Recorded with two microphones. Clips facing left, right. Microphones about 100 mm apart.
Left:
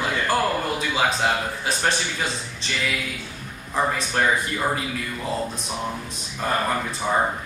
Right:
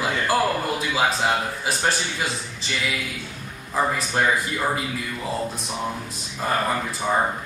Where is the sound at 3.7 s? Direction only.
5° right (ahead or behind).